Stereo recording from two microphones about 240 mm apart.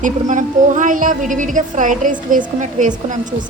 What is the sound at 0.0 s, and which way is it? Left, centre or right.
A woman's voice, right.